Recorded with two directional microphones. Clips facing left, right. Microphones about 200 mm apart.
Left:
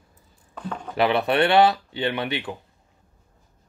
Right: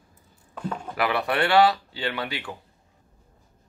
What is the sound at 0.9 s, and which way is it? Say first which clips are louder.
Speech: left 5 dB; 25° left (ahead or behind).